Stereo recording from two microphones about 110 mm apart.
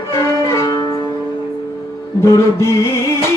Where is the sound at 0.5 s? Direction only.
30° left (ahead or behind).